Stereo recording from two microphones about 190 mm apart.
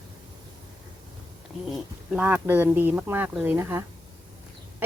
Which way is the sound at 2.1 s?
10° right (ahead or behind).